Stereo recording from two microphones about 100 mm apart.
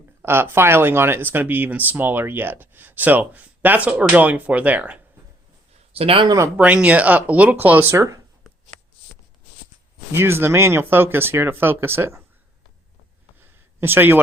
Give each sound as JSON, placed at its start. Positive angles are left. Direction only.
{"t": 0.2, "sound": "speech", "side_deg": -20}
{"t": 5.9, "sound": "speech", "side_deg": -70}
{"t": 6.2, "sound": "speech", "side_deg": -35}
{"t": 6.6, "sound": "speech", "side_deg": -15}
{"t": 10.1, "sound": "speech", "side_deg": -25}
{"t": 13.4, "sound": "a sound", "side_deg": -20}